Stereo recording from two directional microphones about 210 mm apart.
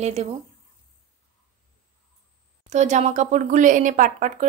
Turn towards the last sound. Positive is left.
turn(degrees=-35)  # may be behind; listen again after turning